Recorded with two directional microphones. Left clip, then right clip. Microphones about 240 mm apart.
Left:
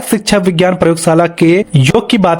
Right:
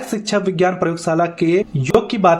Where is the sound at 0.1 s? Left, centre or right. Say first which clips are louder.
Left 8 dB; left.